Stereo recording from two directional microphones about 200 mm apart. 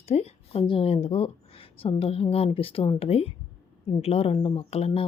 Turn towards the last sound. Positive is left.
turn(degrees=30)  # may be behind; listen again after turning